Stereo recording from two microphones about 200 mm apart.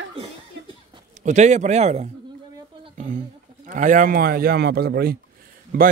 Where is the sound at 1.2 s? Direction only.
35° right (ahead or behind).